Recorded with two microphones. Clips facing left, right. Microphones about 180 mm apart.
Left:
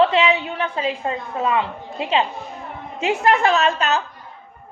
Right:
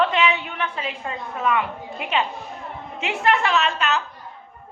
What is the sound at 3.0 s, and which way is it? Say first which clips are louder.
Speech: left 4 dB; 40° left (ahead or behind).